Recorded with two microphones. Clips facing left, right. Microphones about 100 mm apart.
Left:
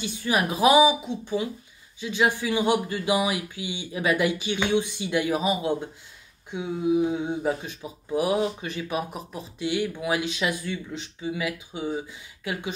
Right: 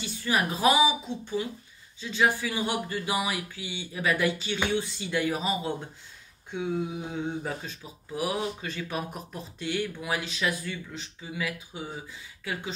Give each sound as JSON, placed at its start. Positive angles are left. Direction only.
{"t": 0.0, "sound": "speech", "side_deg": 15}